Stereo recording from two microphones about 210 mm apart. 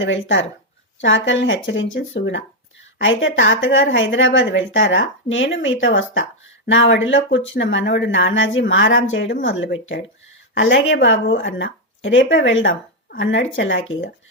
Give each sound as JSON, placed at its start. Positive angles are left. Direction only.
{"t": 0.0, "sound": "speech", "side_deg": 60}